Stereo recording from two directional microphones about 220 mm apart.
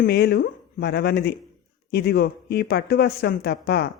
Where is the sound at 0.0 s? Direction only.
45° left (ahead or behind).